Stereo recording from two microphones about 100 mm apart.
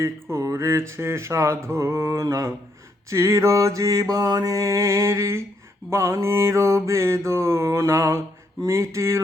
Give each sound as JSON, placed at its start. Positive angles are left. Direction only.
{"t": 0.0, "sound": "speech", "side_deg": -25}
{"t": 3.1, "sound": "mantra", "side_deg": -30}
{"t": 5.9, "sound": "speech", "side_deg": -30}